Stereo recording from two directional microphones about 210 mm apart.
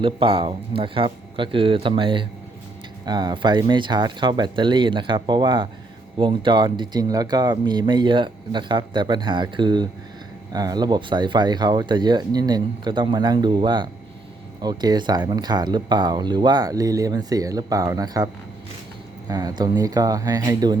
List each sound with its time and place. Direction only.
0.0 s speech: 25° right (ahead or behind)
19.3 s speech: 20° right (ahead or behind)